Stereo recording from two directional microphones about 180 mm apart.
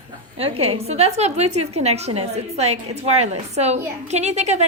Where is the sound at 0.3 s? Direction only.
35° right (ahead or behind).